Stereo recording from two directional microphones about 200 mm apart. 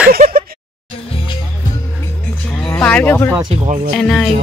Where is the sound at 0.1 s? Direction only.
45° right (ahead or behind).